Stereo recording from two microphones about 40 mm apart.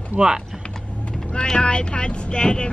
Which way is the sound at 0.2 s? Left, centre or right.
Right.